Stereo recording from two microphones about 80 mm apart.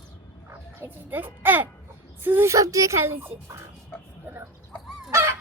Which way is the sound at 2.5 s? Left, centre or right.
Right.